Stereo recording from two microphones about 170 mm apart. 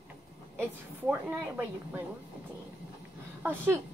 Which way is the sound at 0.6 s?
10° right (ahead or behind).